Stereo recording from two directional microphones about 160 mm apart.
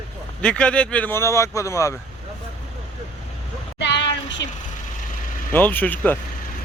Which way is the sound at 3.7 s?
90° left.